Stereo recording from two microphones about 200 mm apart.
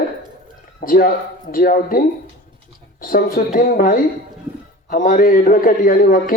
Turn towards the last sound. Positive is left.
turn(degrees=45)  # may be behind; listen again after turning